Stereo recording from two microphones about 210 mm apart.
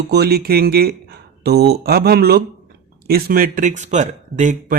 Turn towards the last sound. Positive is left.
turn(degrees=-35)  # may be behind; listen again after turning